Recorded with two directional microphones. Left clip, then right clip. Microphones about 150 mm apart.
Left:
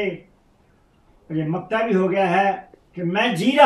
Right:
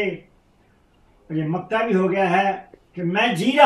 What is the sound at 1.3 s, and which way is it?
Speech, 10° left (ahead or behind).